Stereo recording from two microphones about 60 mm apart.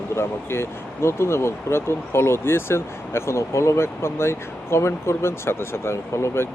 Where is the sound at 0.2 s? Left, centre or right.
Left.